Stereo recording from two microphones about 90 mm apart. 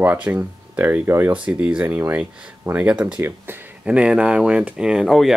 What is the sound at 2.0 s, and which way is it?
Speech, 25° right (ahead or behind).